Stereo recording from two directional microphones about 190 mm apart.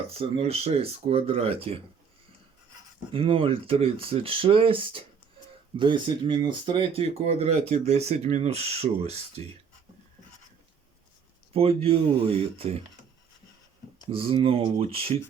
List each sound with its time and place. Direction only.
0.1 s speech: 30° right (ahead or behind)
3.1 s speech: 30° right (ahead or behind)
11.5 s speech: 30° right (ahead or behind)
14.1 s speech: 30° right (ahead or behind)